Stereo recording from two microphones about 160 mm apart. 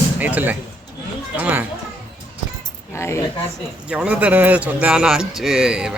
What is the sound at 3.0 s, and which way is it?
Speech, 15° left (ahead or behind).